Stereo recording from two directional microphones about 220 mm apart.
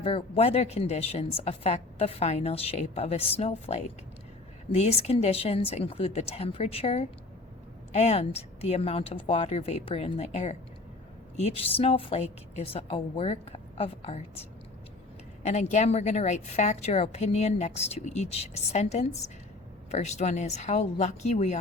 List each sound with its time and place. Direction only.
0.0 s a woman's voice: 25° left (ahead or behind)
15.4 s a woman's voice: 30° left (ahead or behind)